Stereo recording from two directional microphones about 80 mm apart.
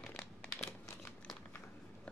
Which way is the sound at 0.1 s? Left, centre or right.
Left.